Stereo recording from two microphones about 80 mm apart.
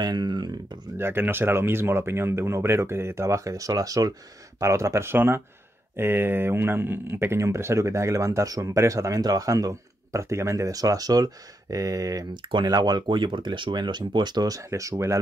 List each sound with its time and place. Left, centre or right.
0.0 s speech: right
0.9 s speech: right
12.4 s speech: right